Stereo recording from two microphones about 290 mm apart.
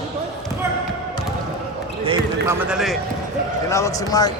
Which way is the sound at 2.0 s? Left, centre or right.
Centre.